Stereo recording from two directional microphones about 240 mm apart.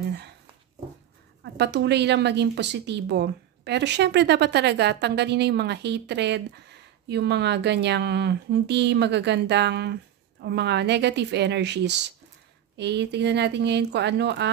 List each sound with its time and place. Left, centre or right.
1.4 s a woman's voice: right